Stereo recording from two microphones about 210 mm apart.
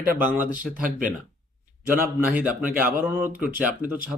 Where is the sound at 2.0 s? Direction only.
5° right (ahead or behind).